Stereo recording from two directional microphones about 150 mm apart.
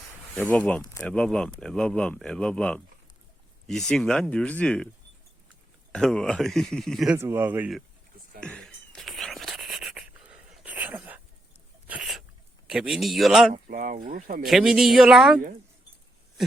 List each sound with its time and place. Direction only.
0.5 s speech: 10° left (ahead or behind)
5.9 s speech: 5° left (ahead or behind)
7.2 s speech: 15° right (ahead or behind)
8.4 s a sound: 5° left (ahead or behind); by 11.2 s 10° right (ahead or behind)
11.9 s sneeze: 5° right (ahead or behind)
12.6 s speech: 5° right (ahead or behind)
13.7 s speech: 65° right (ahead or behind)
14.4 s speech: centre (ahead or behind)